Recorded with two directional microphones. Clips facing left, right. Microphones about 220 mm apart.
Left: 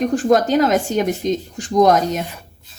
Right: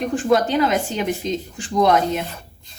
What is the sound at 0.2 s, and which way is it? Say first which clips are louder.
A woman's voice: left 1 dB; 45° left (ahead or behind).